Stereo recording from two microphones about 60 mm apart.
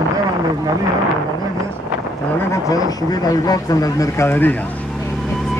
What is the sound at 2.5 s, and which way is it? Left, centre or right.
Speech, left.